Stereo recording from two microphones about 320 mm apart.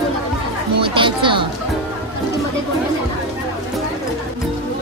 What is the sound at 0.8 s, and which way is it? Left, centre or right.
Music, centre.